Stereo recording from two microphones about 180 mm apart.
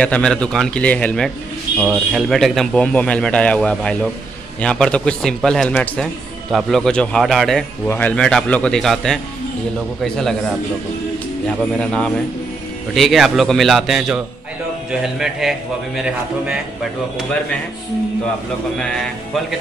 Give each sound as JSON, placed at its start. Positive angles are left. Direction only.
{"t": 0.0, "sound": "a man's voice", "side_deg": 5}
{"t": 11.7, "sound": "a man's voice", "side_deg": 5}
{"t": 18.8, "sound": "a man's voice", "side_deg": 5}